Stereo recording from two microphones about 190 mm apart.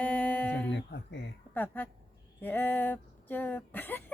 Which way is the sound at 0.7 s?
65° left (ahead or behind).